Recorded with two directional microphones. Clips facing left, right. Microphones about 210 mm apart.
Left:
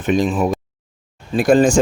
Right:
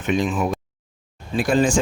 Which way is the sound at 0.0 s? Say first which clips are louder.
Left 4 dB; 35° left (ahead or behind).